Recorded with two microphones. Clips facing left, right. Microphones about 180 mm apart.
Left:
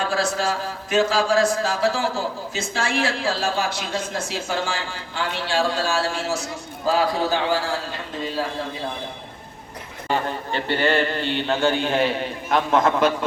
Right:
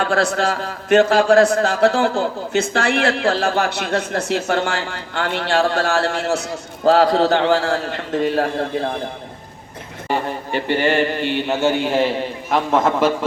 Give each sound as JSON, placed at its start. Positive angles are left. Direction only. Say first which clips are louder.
{"t": 0.0, "sound": "a man's voice", "louder": "right 5 dB", "side_deg": -65}
{"t": 10.1, "sound": "a man's voice", "louder": "right 2 dB", "side_deg": -15}